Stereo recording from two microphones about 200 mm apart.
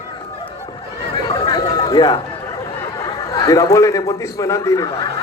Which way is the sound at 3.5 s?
15° left (ahead or behind).